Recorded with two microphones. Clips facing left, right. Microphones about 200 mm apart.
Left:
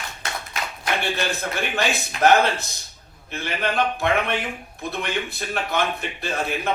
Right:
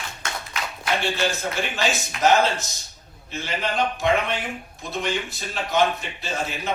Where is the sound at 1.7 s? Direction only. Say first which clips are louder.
Left 1 dB; 60° left (ahead or behind).